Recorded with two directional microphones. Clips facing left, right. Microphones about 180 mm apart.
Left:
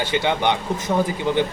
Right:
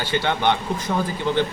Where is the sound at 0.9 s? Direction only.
30° left (ahead or behind).